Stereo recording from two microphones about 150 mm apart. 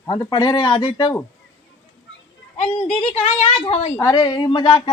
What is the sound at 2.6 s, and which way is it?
A woman's voice, 40° left (ahead or behind).